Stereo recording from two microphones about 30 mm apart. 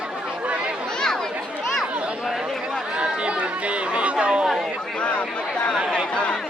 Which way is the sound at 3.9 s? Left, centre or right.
Right.